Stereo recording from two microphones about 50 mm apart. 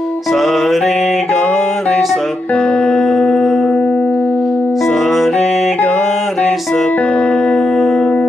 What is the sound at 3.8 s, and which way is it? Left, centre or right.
Music, left.